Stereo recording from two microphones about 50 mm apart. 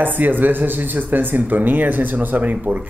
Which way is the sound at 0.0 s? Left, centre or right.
Right.